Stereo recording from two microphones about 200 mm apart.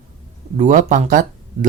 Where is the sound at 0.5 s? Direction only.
35° right (ahead or behind).